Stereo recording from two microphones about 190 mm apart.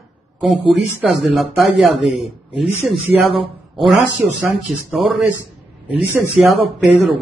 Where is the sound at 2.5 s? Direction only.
Centre (ahead or behind).